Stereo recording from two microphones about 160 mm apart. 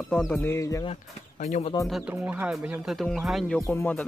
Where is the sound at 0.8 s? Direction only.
45° left (ahead or behind).